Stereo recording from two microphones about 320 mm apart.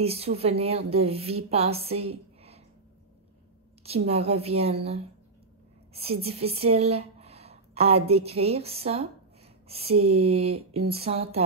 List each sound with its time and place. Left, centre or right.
0.0 s a woman's voice: centre
3.8 s a woman's voice: centre